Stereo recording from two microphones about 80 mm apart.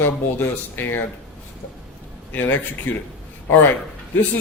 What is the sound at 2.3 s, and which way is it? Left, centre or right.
Speech, left.